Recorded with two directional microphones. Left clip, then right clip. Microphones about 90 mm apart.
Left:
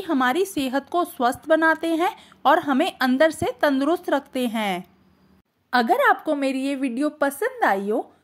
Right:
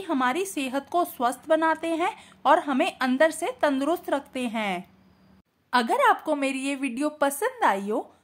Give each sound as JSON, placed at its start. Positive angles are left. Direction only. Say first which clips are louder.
{"t": 0.2, "sound": "a woman's voice", "louder": "left 5 dB", "side_deg": 50}
{"t": 0.8, "sound": "a woman's voice", "louder": "left 2 dB", "side_deg": 25}
{"t": 1.2, "sound": "a woman's voice", "louder": "left 6 dB", "side_deg": 45}